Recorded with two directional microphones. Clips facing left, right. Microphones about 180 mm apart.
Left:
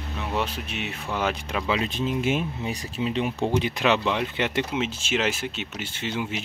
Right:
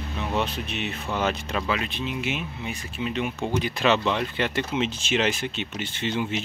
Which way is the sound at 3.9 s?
15° left (ahead or behind).